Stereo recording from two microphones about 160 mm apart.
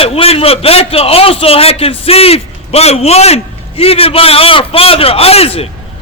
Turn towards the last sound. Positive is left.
turn(degrees=40)  # may be behind; listen again after turning